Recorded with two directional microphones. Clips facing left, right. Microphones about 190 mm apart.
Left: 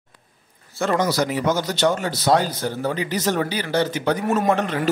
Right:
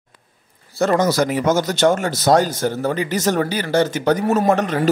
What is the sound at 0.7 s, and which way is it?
A man's voice, 45° right (ahead or behind).